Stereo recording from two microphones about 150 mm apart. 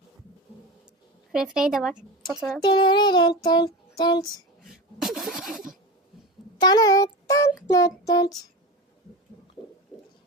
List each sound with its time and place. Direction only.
1.3 s speech: 5° right (ahead or behind)
2.6 s child singing: 30° left (ahead or behind)
4.6 s a sound: centre (ahead or behind)
6.6 s child singing: 25° left (ahead or behind)